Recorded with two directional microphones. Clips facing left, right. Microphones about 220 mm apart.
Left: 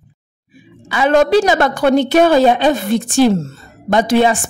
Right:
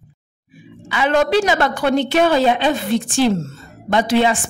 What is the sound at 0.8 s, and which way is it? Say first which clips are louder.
A woman's voice: left 4 dB; 40° left (ahead or behind).